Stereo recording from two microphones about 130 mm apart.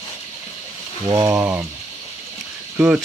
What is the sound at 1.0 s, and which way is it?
Speech, 30° right (ahead or behind).